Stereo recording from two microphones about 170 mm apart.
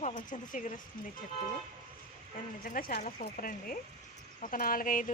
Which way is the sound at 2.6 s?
55° left (ahead or behind).